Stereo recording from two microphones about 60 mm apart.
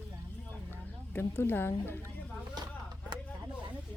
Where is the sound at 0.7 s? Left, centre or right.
Left.